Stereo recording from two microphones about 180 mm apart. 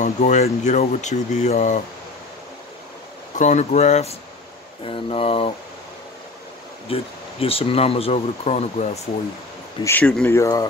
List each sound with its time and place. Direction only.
0.0 s speech: 40° left (ahead or behind)
3.3 s speech: 40° left (ahead or behind)
6.9 s speech: 30° left (ahead or behind)
9.8 s speech: 5° left (ahead or behind)